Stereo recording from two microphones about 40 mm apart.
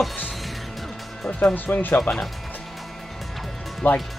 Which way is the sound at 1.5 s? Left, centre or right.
Left.